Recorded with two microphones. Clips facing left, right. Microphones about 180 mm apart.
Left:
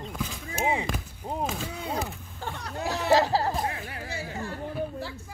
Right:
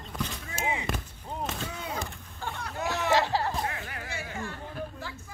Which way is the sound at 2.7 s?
35° left (ahead or behind).